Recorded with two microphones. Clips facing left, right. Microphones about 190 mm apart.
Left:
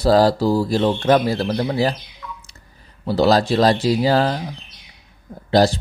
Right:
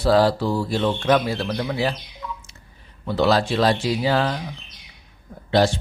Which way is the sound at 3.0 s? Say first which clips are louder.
Left 3 dB; 35° left (ahead or behind).